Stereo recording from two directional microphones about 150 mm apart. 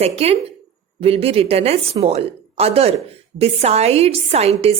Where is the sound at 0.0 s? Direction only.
45° right (ahead or behind).